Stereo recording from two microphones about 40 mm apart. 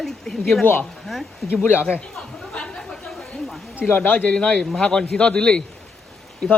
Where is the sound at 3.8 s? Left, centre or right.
Left.